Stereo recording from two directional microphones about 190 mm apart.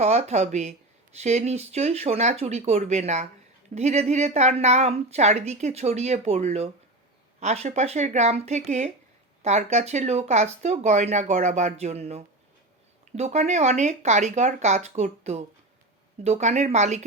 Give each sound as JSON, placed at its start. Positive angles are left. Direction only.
{"t": 0.0, "sound": "a woman's voice", "side_deg": -35}